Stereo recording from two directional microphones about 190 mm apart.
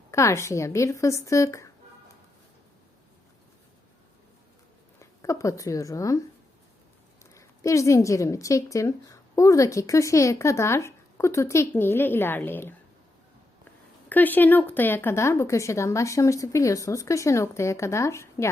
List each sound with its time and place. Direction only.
0.1 s a woman's voice: 15° left (ahead or behind)
4.9 s speech: 15° left (ahead or behind)
7.3 s a woman's voice: 15° left (ahead or behind)
14.1 s a woman's voice: 10° left (ahead or behind)